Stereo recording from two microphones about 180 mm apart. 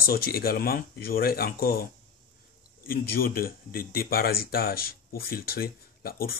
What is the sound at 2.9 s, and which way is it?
Speech, 55° left (ahead or behind).